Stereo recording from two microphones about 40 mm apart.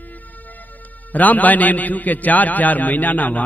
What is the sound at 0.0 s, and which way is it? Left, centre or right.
A man's voice, left.